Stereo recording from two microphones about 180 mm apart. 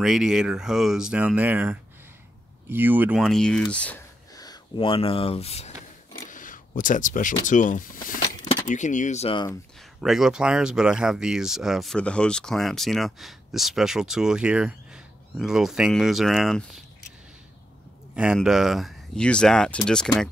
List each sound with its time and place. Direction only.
0.0 s speech: 5° right (ahead or behind)
3.2 s speech: centre (ahead or behind)
4.4 s speech: 25° left (ahead or behind)
6.3 s speech: 50° left (ahead or behind); by 9.5 s 30° left (ahead or behind)
9.9 s speech: centre (ahead or behind)
18.1 s speech: 5° right (ahead or behind)